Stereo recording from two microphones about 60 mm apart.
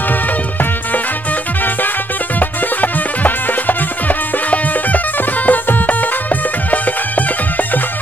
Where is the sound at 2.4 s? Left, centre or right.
Left.